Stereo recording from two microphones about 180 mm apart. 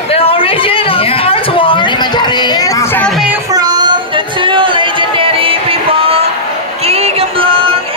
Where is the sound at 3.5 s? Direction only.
20° right (ahead or behind).